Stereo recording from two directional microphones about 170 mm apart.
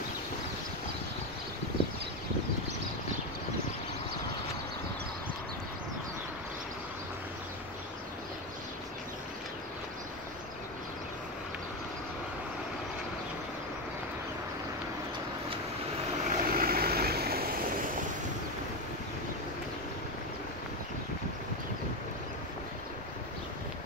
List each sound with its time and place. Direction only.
16.3 s vehicle: 60° right (ahead or behind)